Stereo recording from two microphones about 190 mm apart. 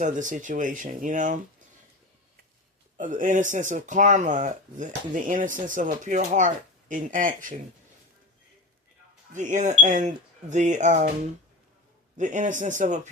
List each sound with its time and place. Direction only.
0.0 s speech: 40° right (ahead or behind)
3.0 s speech: 45° right (ahead or behind)
9.3 s a man's voice: 40° right (ahead or behind)
12.1 s a man's voice: 40° right (ahead or behind)